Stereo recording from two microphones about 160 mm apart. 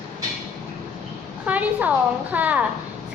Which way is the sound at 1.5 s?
10° right (ahead or behind).